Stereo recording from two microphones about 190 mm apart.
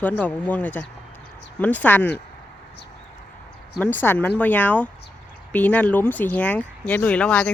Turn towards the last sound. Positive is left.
turn(degrees=5)  # may be behind; listen again after turning